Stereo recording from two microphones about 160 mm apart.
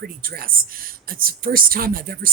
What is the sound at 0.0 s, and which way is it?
Speech, 65° right (ahead or behind).